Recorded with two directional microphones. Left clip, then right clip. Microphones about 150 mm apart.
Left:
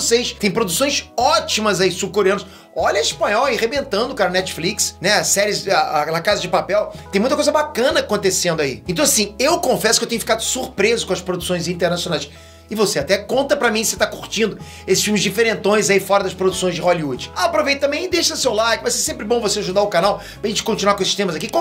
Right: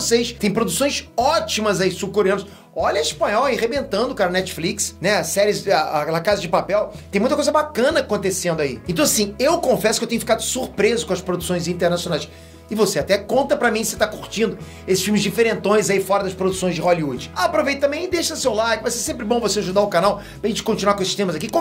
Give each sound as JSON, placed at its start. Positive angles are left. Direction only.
{"t": 0.0, "sound": "speech", "side_deg": 45}
{"t": 2.0, "sound": "speech", "side_deg": 60}
{"t": 5.5, "sound": "speech", "side_deg": 15}
{"t": 7.1, "sound": "speech", "side_deg": 40}
{"t": 8.1, "sound": "speech", "side_deg": 80}
{"t": 8.8, "sound": "speech", "side_deg": 30}
{"t": 10.2, "sound": "speech", "side_deg": 15}
{"t": 10.8, "sound": "speech", "side_deg": 25}
{"t": 18.9, "sound": "speech", "side_deg": 25}
{"t": 20.4, "sound": "speech", "side_deg": 30}